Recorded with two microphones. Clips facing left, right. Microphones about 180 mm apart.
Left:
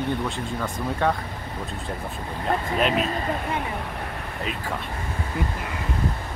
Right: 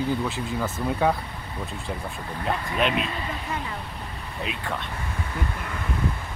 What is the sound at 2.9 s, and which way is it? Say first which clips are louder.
Speech: left 3 dB; 40° left (ahead or behind).